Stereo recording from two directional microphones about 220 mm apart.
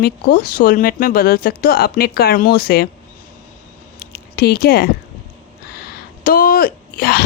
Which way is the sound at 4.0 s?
45° left (ahead or behind).